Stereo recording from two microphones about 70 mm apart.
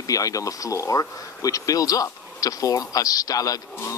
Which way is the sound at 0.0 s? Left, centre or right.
Left.